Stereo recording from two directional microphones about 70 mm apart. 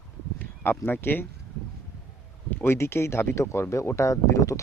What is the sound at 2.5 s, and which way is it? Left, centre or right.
Speech, left.